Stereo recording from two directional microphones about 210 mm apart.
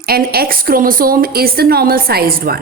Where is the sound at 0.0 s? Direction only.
45° right (ahead or behind).